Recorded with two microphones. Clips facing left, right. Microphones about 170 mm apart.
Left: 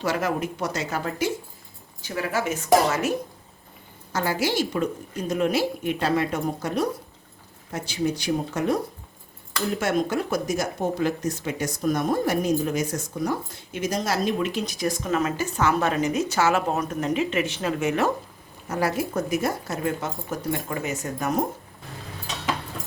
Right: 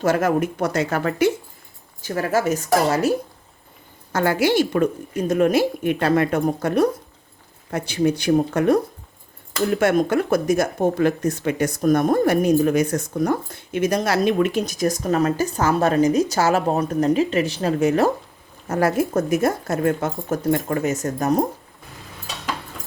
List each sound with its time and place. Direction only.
0.0 s speech: 50° right (ahead or behind)
2.0 s speech: 45° right (ahead or behind)
4.1 s speech: 60° right (ahead or behind)
9.8 s speech: 60° right (ahead or behind); by 18.1 s 35° right (ahead or behind)
18.7 s speech: 50° right (ahead or behind)